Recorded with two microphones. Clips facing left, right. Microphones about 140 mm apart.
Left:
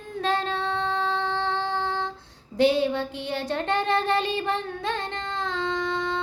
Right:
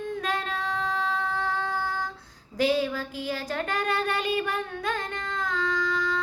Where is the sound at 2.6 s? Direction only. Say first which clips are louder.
Left 4 dB; 25° left (ahead or behind).